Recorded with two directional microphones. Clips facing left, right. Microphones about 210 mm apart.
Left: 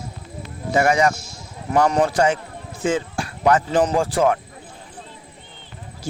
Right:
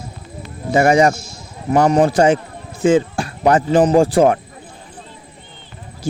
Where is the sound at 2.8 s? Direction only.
30° right (ahead or behind).